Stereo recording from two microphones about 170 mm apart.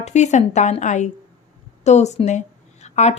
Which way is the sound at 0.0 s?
40° left (ahead or behind).